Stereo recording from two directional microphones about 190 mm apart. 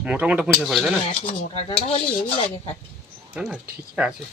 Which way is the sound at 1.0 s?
40° left (ahead or behind).